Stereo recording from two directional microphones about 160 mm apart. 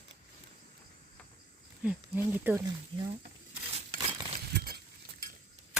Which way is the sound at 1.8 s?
10° right (ahead or behind).